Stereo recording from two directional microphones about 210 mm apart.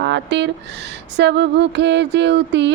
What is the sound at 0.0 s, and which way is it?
Speech, 55° right (ahead or behind).